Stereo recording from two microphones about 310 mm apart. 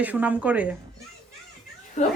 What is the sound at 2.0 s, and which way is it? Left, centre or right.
Speech, left.